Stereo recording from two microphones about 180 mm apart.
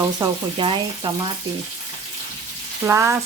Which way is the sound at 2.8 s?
15° right (ahead or behind).